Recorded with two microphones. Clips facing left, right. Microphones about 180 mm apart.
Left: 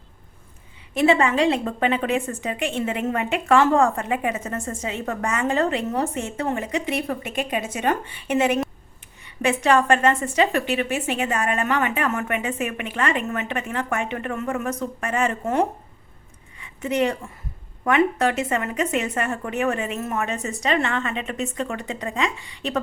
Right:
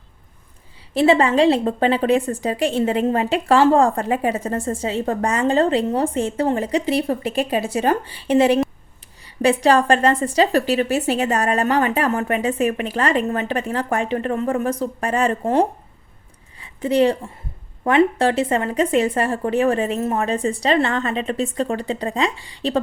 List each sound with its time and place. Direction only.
0.9 s a woman's voice: 30° right (ahead or behind)
16.6 s a sound: 30° right (ahead or behind)
17.8 s a woman's voice: 30° right (ahead or behind)